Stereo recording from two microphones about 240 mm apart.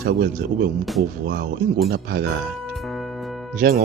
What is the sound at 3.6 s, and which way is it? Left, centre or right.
Speech, right.